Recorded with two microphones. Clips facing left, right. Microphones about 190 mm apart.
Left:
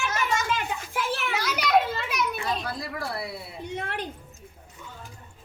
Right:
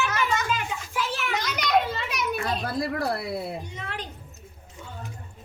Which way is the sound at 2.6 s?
55° right (ahead or behind).